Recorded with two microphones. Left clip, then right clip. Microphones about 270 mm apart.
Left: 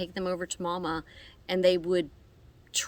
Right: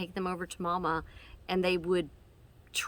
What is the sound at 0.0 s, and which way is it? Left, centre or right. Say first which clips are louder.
A woman's voice: left 4 dB; centre.